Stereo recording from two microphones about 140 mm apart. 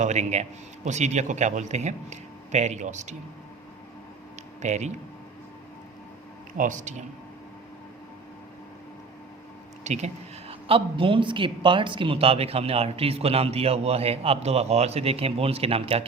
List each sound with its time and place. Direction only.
0.0 s a man's voice: 55° right (ahead or behind)
4.6 s a man's voice: 55° right (ahead or behind)
6.6 s a man's voice: 60° right (ahead or behind)
9.8 s speech: 55° right (ahead or behind)
10.5 s speech: 40° right (ahead or behind)